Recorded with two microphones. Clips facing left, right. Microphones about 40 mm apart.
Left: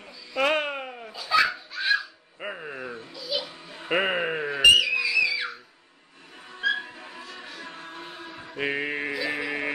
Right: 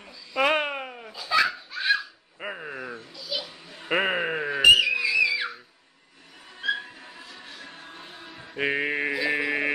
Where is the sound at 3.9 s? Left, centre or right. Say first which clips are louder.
Even; centre.